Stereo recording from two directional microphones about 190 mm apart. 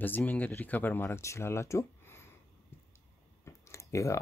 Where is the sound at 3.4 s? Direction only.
15° left (ahead or behind).